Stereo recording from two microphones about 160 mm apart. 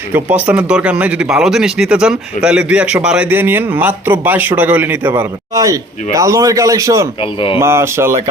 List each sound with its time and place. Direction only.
0.1 s speech: 10° right (ahead or behind)
7.2 s speech: 35° left (ahead or behind)
7.6 s speech: 15° right (ahead or behind)